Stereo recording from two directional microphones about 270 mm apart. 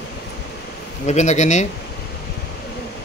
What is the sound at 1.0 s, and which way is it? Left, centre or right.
Speech, left.